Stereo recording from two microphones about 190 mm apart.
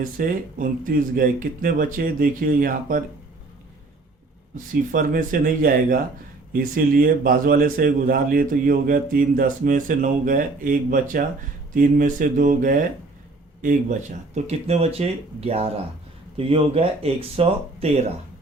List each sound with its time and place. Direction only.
0.2 s a man's voice: 45° right (ahead or behind)
4.5 s a man's voice: 45° right (ahead or behind)